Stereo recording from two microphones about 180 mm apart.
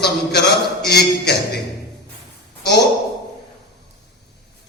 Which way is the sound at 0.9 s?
65° left (ahead or behind).